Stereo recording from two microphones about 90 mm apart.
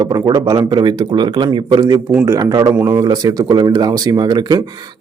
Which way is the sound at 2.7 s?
30° right (ahead or behind).